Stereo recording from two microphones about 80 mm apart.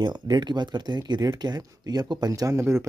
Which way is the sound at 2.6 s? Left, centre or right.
Right.